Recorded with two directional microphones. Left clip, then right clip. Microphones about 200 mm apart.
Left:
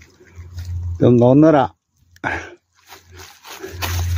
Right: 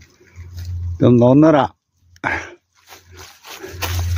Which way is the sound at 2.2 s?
15° right (ahead or behind).